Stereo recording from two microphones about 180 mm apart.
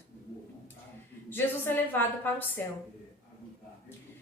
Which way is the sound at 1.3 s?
10° left (ahead or behind).